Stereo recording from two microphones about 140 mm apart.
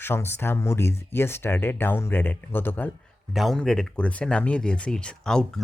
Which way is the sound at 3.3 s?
Centre (ahead or behind).